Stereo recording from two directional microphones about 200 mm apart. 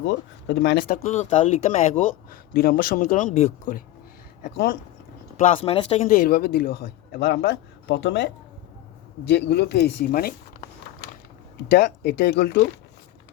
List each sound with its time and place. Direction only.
0.0 s speech: 65° left (ahead or behind); by 3.8 s 40° left (ahead or behind)
4.4 s speech: 50° left (ahead or behind)
5.4 s speech: 30° left (ahead or behind); by 8.3 s 60° left (ahead or behind)
9.3 s speech: 55° left (ahead or behind)
11.7 s speech: 55° left (ahead or behind)